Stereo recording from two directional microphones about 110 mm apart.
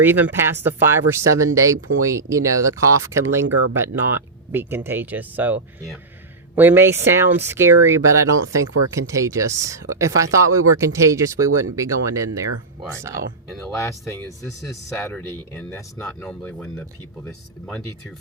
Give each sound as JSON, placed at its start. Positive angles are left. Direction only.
{"t": 0.0, "sound": "speech", "side_deg": -20}
{"t": 6.6, "sound": "speech", "side_deg": -20}
{"t": 14.1, "sound": "speech", "side_deg": 25}
{"t": 14.6, "sound": "speech", "side_deg": 0}
{"t": 15.4, "sound": "speech", "side_deg": 20}